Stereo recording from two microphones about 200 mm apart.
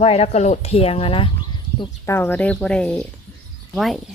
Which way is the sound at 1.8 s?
10° left (ahead or behind).